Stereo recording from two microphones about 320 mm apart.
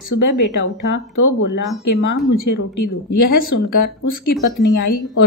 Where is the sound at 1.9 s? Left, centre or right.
Left.